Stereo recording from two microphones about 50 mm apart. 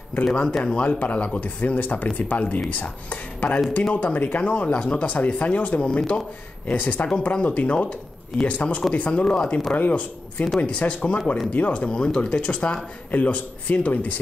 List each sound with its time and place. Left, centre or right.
0.2 s speech: left
5.9 s speech: centre
6.7 s speech: left
9.8 s speech: left
13.1 s speech: left